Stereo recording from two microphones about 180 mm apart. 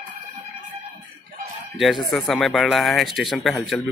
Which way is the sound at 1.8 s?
Centre (ahead or behind).